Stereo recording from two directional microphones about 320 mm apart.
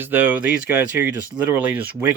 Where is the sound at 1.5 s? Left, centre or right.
Centre.